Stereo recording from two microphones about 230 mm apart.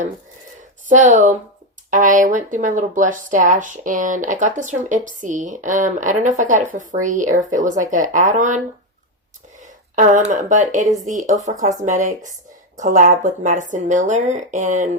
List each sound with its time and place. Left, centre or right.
0.9 s speech: right
9.6 s speech: right